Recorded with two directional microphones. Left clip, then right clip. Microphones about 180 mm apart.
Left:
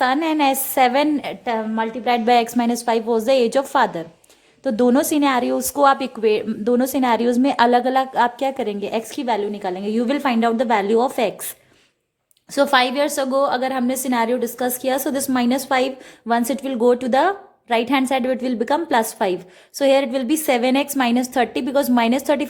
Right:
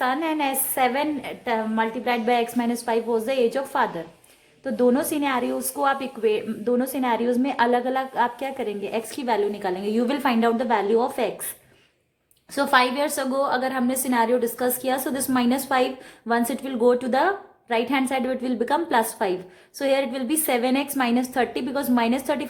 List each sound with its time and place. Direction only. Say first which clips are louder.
0.0 s a woman's voice: left 6 dB; 40° left (ahead or behind)
1.5 s a woman's voice: right 2 dB; 25° left (ahead or behind)
12.5 s a woman's voice: left 3 dB; 30° left (ahead or behind)